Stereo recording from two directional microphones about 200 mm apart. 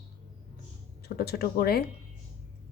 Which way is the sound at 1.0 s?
50° left (ahead or behind).